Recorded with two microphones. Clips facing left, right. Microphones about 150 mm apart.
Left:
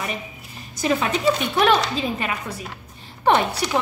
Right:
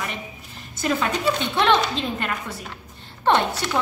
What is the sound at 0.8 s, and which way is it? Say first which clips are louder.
A woman's voice: left 2 dB; 5° left (ahead or behind).